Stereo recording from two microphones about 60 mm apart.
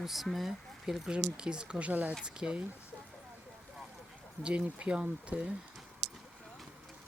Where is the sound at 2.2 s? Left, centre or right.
Centre.